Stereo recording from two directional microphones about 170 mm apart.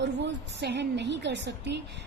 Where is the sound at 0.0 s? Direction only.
90° right.